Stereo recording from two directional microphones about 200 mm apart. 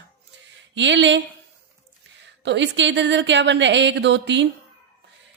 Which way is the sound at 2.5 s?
65° right (ahead or behind).